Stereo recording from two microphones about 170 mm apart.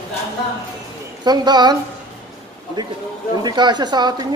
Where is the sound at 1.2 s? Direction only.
25° right (ahead or behind).